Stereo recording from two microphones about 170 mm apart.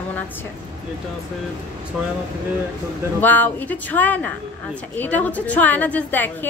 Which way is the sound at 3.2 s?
10° left (ahead or behind).